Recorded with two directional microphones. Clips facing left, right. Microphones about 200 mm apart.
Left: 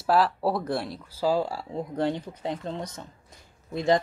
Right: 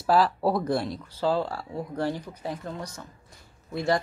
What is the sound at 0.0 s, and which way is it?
Speech, centre (ahead or behind).